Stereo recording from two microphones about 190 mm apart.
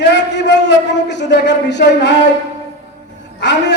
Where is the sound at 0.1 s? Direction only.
65° left (ahead or behind).